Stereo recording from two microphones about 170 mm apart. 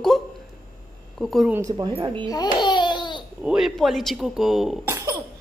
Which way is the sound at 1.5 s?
20° right (ahead or behind).